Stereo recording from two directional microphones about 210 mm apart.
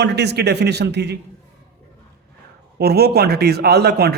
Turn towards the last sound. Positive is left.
turn(degrees=-50)  # may be behind; listen again after turning